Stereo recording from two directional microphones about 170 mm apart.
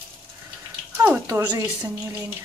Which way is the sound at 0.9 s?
15° right (ahead or behind).